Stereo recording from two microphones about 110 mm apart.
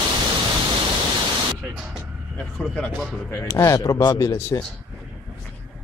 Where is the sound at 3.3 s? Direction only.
25° left (ahead or behind).